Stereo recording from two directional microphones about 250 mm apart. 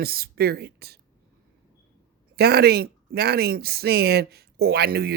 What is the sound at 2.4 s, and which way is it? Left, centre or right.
Speech, right.